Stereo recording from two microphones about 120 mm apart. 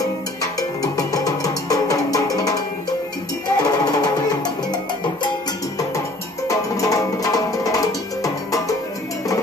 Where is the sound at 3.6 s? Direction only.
30° left (ahead or behind).